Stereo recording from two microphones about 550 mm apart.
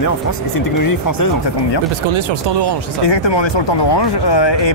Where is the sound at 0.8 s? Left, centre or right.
Left.